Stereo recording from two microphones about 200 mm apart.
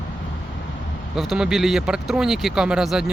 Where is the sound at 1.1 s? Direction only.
Centre (ahead or behind).